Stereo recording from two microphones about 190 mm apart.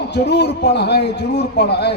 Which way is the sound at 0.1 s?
65° left (ahead or behind).